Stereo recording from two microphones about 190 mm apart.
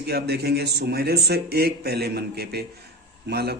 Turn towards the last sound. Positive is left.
turn(degrees=-55)  # may be behind; listen again after turning